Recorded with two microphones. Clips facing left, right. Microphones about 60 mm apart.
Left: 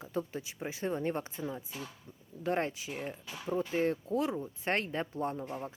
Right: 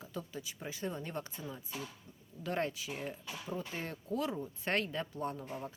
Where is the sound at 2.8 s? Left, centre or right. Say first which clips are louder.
Left 2 dB; centre.